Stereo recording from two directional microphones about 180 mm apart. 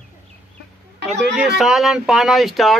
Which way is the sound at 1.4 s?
Centre (ahead or behind).